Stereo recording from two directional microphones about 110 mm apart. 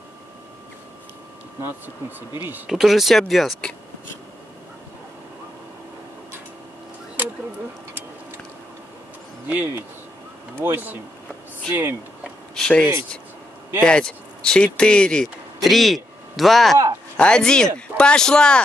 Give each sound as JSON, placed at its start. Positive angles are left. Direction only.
{"t": 1.6, "sound": "speech", "side_deg": -20}
{"t": 2.7, "sound": "speech", "side_deg": 0}
{"t": 9.5, "sound": "speech", "side_deg": -15}
{"t": 12.2, "sound": "a sound", "side_deg": 5}
{"t": 13.8, "sound": "speech", "side_deg": 10}